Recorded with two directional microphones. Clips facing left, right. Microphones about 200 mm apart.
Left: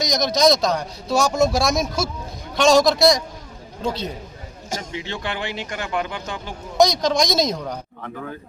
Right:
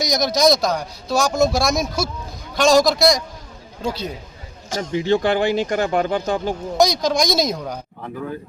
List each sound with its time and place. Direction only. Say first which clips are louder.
0.0 s a sound: right 1 dB; 5° right (ahead or behind)
0.3 s a man's voice: even; centre (ahead or behind)
4.8 s speech: right 16 dB; 40° right (ahead or behind)
6.7 s a man's voice: left 1 dB; centre (ahead or behind)